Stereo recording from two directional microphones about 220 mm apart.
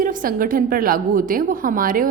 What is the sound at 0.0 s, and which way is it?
A woman's voice, 40° right (ahead or behind).